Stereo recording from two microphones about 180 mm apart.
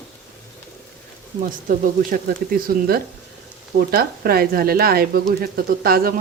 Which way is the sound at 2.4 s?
55° right (ahead or behind).